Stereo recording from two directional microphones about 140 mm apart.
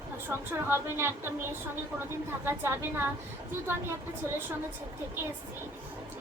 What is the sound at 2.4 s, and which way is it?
Speech, 15° right (ahead or behind).